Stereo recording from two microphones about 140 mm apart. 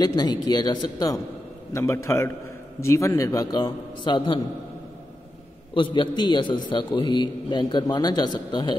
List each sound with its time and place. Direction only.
0.0 s a man's voice: 30° left (ahead or behind)
5.8 s a man's voice: 35° left (ahead or behind)